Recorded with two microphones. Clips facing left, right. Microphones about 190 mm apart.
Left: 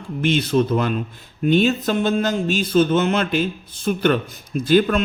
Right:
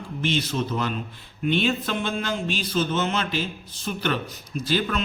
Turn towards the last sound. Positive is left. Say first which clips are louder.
# left 9 dB
turn(degrees=50)  # may be behind; listen again after turning